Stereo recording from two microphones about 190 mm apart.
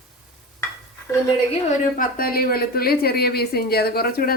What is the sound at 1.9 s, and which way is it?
Speech, 50° left (ahead or behind).